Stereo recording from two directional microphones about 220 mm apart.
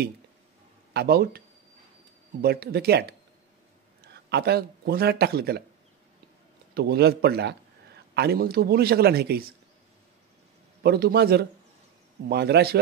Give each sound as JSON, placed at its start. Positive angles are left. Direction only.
{"t": 0.9, "sound": "a man's voice", "side_deg": -45}
{"t": 2.4, "sound": "a man's voice", "side_deg": -45}
{"t": 6.7, "sound": "a man's voice", "side_deg": -45}
{"t": 10.8, "sound": "a man's voice", "side_deg": -45}